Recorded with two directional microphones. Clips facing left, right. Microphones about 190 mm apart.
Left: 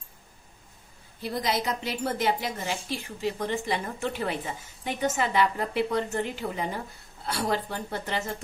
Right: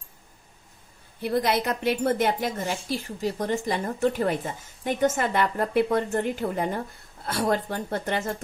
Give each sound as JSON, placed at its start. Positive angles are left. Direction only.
{"t": 1.2, "sound": "a woman's voice", "side_deg": -60}